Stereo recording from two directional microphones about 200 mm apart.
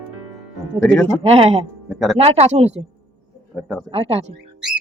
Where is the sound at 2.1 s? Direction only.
30° right (ahead or behind).